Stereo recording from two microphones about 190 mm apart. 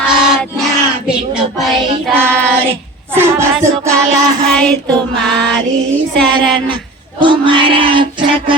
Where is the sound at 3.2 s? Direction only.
15° right (ahead or behind).